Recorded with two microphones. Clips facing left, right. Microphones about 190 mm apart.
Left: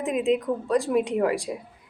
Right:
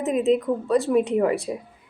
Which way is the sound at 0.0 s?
40° right (ahead or behind).